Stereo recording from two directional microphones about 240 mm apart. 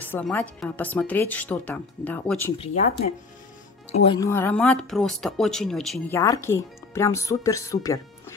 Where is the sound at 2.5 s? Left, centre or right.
Left.